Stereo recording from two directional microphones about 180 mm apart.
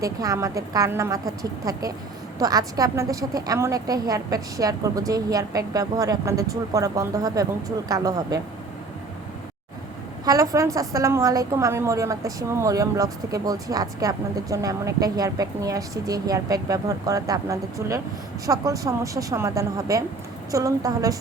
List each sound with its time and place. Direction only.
0.0 s a woman's voice: 20° right (ahead or behind)
10.2 s a woman's voice: 20° right (ahead or behind)